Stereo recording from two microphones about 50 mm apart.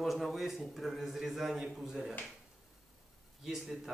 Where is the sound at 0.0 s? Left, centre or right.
Centre.